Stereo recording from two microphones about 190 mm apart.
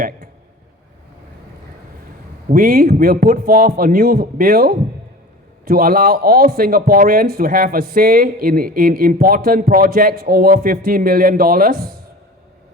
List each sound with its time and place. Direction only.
2.5 s speech: 50° right (ahead or behind)